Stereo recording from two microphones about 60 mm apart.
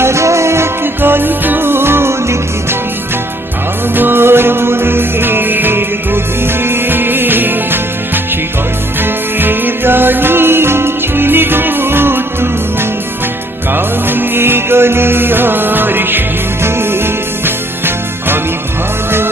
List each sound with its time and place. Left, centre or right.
0.0 s music: right
3.9 s music: right
13.7 s music: right